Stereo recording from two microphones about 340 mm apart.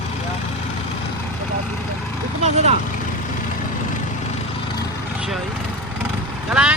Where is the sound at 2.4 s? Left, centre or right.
Centre.